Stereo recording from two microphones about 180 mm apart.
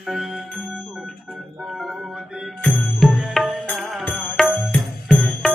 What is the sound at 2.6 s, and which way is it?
Music, centre (ahead or behind).